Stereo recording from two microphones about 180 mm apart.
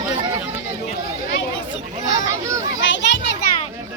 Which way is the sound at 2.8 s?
85° left.